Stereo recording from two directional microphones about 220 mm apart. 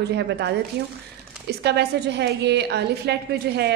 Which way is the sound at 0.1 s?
50° right (ahead or behind).